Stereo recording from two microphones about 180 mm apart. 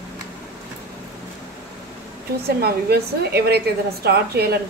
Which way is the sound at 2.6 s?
60° right (ahead or behind).